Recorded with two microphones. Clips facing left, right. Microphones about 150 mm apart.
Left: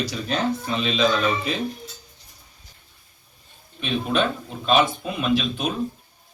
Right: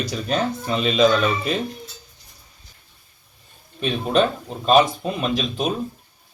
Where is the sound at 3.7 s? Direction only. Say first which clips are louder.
Right 3 dB; 40° right (ahead or behind).